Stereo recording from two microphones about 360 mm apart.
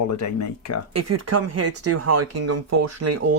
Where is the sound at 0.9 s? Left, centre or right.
Right.